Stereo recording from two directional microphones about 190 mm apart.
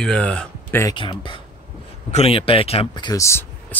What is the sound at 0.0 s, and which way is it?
Speech, 5° left (ahead or behind).